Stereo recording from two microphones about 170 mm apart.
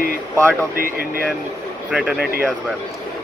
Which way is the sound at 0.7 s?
60° right (ahead or behind).